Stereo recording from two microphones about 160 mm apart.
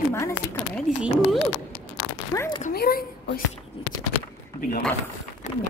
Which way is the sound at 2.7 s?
75° left (ahead or behind).